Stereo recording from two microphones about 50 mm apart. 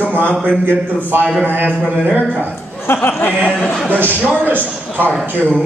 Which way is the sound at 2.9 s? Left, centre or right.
Left.